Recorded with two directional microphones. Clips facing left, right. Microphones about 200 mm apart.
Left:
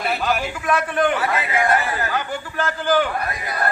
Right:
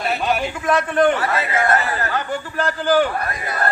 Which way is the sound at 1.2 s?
15° left (ahead or behind).